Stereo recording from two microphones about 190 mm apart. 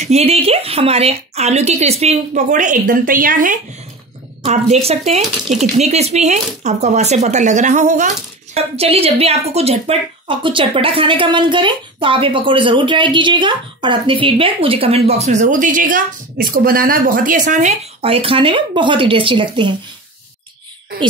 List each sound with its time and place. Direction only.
0.0 s a woman's voice: 35° right (ahead or behind)
4.5 s a woman's voice: 35° right (ahead or behind)
5.2 s speech: centre (ahead or behind)
5.8 s a woman's voice: 35° right (ahead or behind)